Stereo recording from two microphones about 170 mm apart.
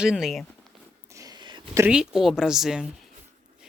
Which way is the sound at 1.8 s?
5° right (ahead or behind).